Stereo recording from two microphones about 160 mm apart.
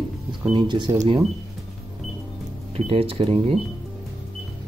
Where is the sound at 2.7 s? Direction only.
35° right (ahead or behind).